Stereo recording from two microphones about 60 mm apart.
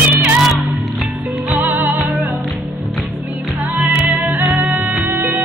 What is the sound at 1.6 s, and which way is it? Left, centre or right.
Music, right.